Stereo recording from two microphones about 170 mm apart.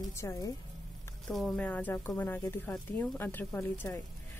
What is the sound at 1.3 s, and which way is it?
A woman's voice, centre (ahead or behind).